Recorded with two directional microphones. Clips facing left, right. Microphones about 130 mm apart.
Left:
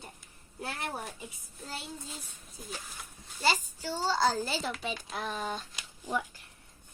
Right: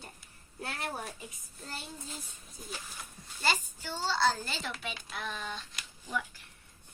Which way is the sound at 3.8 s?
40° left (ahead or behind).